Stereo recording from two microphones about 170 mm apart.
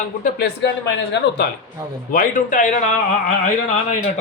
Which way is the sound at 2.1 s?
55° left (ahead or behind).